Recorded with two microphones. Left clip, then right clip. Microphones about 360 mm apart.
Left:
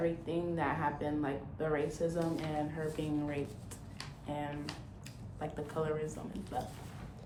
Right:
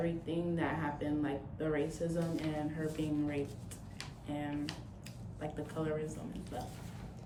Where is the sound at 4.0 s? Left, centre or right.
Centre.